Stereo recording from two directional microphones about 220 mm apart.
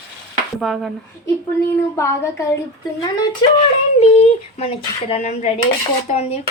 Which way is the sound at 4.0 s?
30° left (ahead or behind).